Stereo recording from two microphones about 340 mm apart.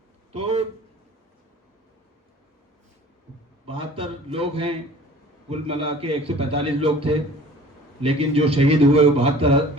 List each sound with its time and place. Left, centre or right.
0.3 s a man's voice: centre
3.7 s a man's voice: centre